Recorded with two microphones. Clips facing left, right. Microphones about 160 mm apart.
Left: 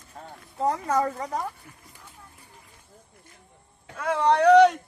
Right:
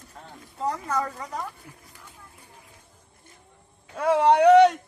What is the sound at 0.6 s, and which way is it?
Speech, 25° left (ahead or behind).